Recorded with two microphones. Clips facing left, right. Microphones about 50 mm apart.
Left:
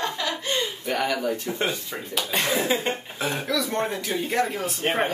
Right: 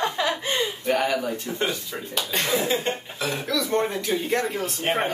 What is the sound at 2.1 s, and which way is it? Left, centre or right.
A woman's voice, centre.